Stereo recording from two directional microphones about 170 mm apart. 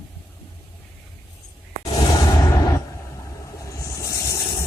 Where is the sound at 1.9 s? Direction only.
20° left (ahead or behind).